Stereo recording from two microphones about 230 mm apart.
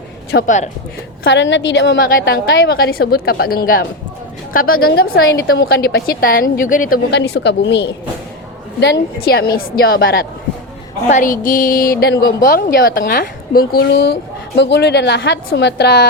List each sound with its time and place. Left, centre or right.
0.3 s a woman's voice: left
1.2 s a woman's voice: left
2.0 s a woman's voice: left